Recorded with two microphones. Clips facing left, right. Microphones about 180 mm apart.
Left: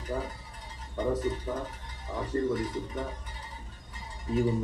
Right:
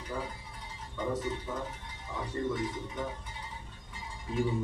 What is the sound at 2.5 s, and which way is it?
Speech, 45° left (ahead or behind).